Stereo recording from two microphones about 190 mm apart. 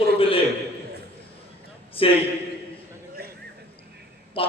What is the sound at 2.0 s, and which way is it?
Speech, 30° left (ahead or behind).